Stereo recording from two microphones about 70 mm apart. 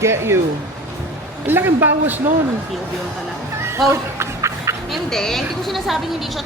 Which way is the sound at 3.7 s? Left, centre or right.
Right.